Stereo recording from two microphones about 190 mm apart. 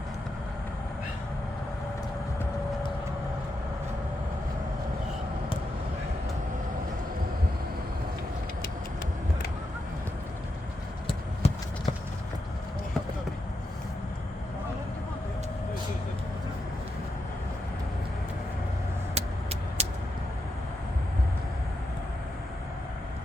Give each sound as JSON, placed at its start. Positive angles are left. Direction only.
{"t": 11.0, "sound": "clip-clop", "side_deg": 30}
{"t": 19.1, "sound": "vehicle", "side_deg": -35}